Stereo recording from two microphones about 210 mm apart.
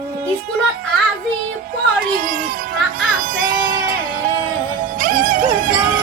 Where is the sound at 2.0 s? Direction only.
40° right (ahead or behind).